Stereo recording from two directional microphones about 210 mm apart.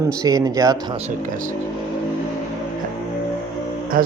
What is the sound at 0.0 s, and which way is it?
Speech, 15° right (ahead or behind).